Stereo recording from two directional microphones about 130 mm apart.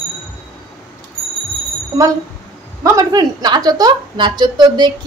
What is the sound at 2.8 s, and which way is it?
A woman's voice, 25° right (ahead or behind).